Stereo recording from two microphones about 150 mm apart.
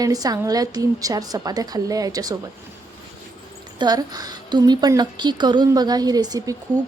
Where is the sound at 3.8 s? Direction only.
25° right (ahead or behind).